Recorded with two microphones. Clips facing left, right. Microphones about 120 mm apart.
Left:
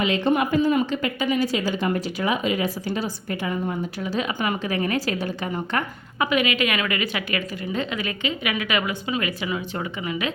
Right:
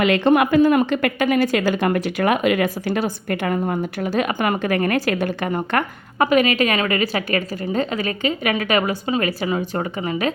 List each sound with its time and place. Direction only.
0.0 s a woman's voice: 70° right (ahead or behind); by 10.3 s 40° right (ahead or behind)